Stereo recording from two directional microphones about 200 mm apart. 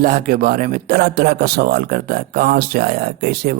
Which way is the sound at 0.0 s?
45° right (ahead or behind).